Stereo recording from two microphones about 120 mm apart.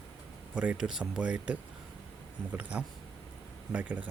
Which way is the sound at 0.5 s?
10° right (ahead or behind).